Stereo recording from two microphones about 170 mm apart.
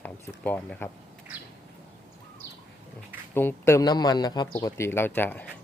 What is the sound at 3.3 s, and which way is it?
Speech, 15° left (ahead or behind).